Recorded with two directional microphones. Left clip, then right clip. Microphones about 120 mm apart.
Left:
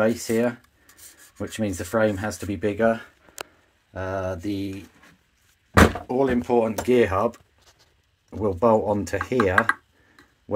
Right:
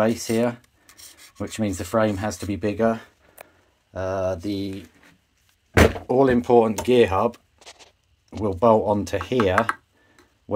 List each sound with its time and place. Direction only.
0.0 s speech: centre (ahead or behind)
3.9 s speech: 15° right (ahead or behind)
6.0 s speech: 65° right (ahead or behind)
6.8 s speech: 15° right (ahead or behind)
8.3 s speech: centre (ahead or behind)